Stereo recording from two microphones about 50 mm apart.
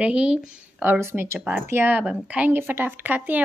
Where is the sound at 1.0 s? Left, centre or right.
Right.